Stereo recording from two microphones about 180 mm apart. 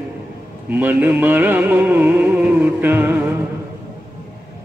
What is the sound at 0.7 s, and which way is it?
Music, 10° right (ahead or behind).